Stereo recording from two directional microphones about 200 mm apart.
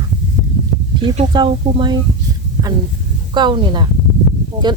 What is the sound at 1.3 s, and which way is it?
Speech, 25° right (ahead or behind).